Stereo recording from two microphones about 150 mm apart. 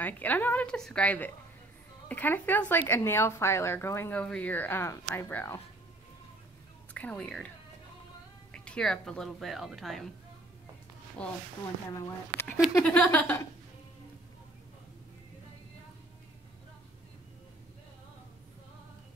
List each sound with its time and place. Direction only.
0.0 s speech: 10° left (ahead or behind)
6.9 s speech: 10° left (ahead or behind)
8.5 s a woman's voice: 5° left (ahead or behind)
11.2 s speech: 5° left (ahead or behind)
11.9 s speech: 20° left (ahead or behind)
12.8 s speech: 5° left (ahead or behind)